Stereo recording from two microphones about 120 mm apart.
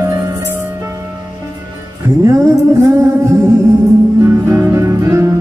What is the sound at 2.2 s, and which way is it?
Music, 25° right (ahead or behind).